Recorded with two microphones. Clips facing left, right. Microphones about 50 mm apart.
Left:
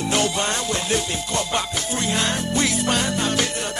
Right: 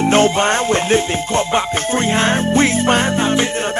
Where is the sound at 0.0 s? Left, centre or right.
Right.